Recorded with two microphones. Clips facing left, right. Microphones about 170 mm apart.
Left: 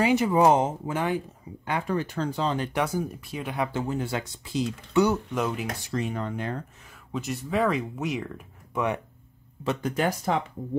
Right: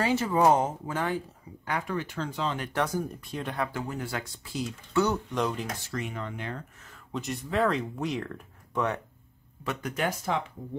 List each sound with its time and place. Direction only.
0.0 s speech: 15° left (ahead or behind)
1.7 s speech: 30° left (ahead or behind)
2.7 s speech: 10° left (ahead or behind)
3.6 s speech: 25° left (ahead or behind)
5.9 s speech: 35° left (ahead or behind)
7.1 s speech: centre (ahead or behind)
9.7 s speech: 30° left (ahead or behind)